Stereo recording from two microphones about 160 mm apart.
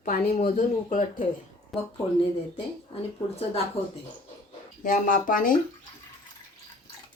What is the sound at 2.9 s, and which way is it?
Speech, 40° left (ahead or behind).